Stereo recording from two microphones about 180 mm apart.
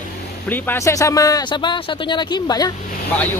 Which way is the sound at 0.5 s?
10° left (ahead or behind).